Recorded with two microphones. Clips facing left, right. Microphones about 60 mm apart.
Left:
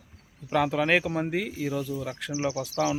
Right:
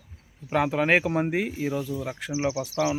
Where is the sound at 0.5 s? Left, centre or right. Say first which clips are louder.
Right 1 dB; right.